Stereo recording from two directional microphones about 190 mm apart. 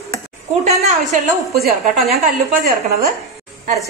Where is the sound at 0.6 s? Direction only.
35° right (ahead or behind).